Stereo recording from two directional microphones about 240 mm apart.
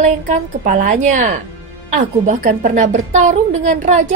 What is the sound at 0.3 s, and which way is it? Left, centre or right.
A woman's voice, right.